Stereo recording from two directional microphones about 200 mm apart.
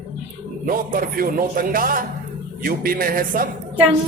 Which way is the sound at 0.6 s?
45° right (ahead or behind).